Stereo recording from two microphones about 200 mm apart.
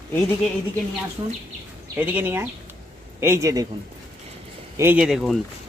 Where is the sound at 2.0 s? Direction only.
10° right (ahead or behind).